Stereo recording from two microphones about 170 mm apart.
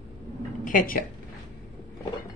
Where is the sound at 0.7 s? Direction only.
55° left (ahead or behind).